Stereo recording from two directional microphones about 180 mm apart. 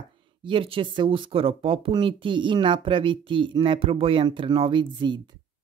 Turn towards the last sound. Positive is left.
turn(degrees=-25)  # may be behind; listen again after turning